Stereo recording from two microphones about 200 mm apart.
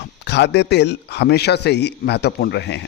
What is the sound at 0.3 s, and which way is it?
Speech, 60° left (ahead or behind).